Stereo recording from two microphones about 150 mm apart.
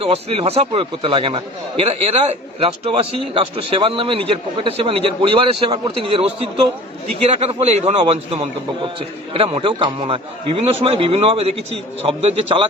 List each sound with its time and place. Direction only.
0.0 s a man's voice: 40° right (ahead or behind)
7.3 s a man's voice: 40° right (ahead or behind)